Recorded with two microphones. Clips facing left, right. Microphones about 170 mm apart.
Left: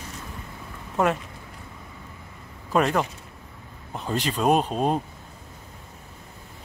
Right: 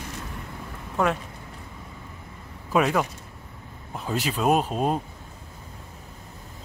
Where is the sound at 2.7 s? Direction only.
5° right (ahead or behind).